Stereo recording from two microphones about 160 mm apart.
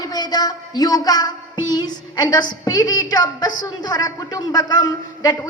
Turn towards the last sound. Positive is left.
turn(degrees=25)  # may be behind; listen again after turning